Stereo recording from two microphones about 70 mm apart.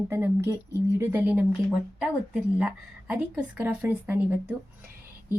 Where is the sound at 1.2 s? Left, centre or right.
Right.